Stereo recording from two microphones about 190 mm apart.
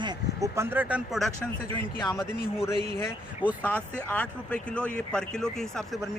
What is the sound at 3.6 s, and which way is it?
Speech, 10° left (ahead or behind).